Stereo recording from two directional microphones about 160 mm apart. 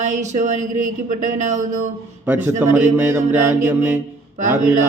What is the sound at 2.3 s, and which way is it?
Mantra, 10° right (ahead or behind).